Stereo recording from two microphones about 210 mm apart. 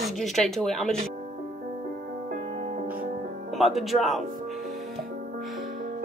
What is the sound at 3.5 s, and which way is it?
Speech, centre (ahead or behind).